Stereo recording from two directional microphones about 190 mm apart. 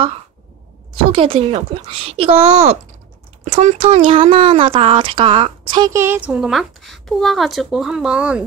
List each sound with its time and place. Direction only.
1.1 s speech: 30° right (ahead or behind)
5.9 s a woman's voice: 10° right (ahead or behind)